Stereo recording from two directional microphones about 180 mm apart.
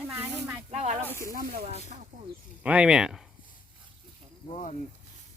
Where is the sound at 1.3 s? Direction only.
55° right (ahead or behind).